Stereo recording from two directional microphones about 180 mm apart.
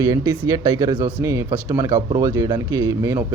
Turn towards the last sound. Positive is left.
turn(degrees=-15)  # may be behind; listen again after turning